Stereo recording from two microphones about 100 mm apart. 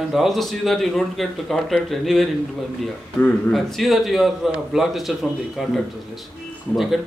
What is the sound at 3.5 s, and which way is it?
A man's voice, centre (ahead or behind).